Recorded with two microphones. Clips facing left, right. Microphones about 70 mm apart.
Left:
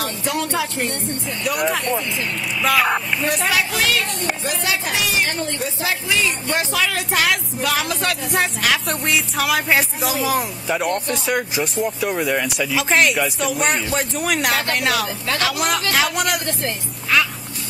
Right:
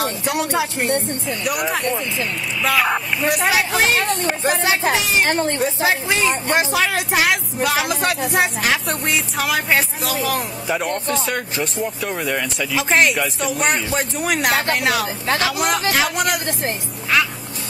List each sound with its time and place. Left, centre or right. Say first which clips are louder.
0.2 s speech: left 1 dB; centre
1.4 s speech: left 1 dB; centre
3.7 s speech: right 3 dB; right; by 16.5 s centre